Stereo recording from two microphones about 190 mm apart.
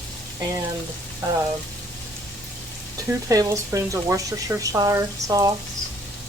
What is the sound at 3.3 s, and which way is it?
Speech, 15° right (ahead or behind).